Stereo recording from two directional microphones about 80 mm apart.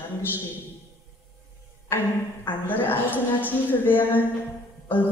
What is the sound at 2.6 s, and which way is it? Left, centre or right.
A woman's voice, left.